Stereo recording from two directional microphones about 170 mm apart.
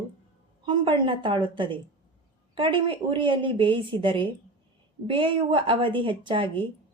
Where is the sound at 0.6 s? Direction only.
30° right (ahead or behind).